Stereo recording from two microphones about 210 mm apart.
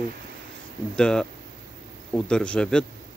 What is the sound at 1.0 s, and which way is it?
Speech, 5° left (ahead or behind).